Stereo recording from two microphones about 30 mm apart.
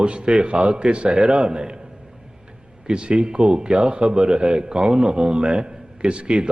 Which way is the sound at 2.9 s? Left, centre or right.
Right.